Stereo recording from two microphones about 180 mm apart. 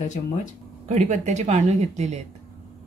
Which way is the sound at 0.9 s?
40° right (ahead or behind).